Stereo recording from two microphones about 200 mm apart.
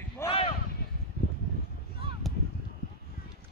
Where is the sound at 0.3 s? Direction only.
30° left (ahead or behind).